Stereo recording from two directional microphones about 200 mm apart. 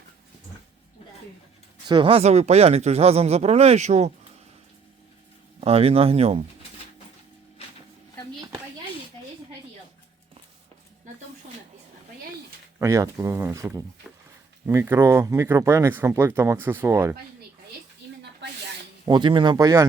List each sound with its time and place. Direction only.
1.9 s speech: 25° right (ahead or behind)
5.5 s speech: 30° right (ahead or behind)
8.4 s a sound: 15° right (ahead or behind)
12.8 s speech: 15° right (ahead or behind)
14.0 s a sound: 5° right (ahead or behind)
14.7 s speech: 15° right (ahead or behind)
19.0 s speech: 20° right (ahead or behind)